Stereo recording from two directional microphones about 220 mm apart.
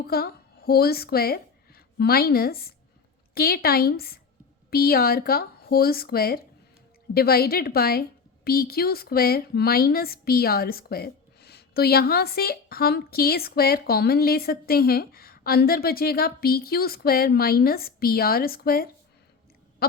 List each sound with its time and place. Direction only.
0.0 s a woman's voice: 45° left (ahead or behind)